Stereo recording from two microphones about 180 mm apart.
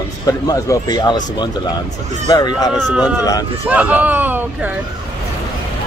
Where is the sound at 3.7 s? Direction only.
10° right (ahead or behind).